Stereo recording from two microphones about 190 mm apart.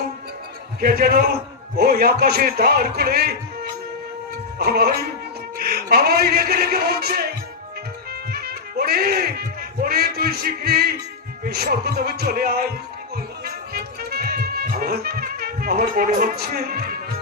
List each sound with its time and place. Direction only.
0.8 s speech: 50° right (ahead or behind)
8.3 s music: 55° right (ahead or behind)
11.4 s speech: 55° right (ahead or behind)
13.4 s music: 55° right (ahead or behind)